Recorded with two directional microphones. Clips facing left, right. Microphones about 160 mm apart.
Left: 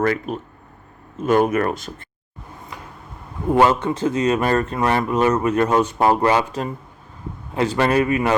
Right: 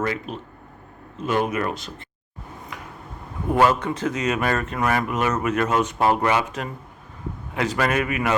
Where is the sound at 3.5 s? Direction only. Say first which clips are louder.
Left 3 dB; 25° left (ahead or behind).